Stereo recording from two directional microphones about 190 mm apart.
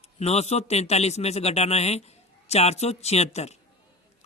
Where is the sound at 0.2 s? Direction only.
35° left (ahead or behind).